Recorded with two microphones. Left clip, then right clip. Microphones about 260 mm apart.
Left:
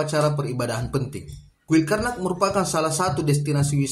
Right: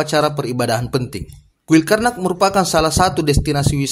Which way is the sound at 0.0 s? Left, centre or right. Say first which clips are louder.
Right 6 dB; right.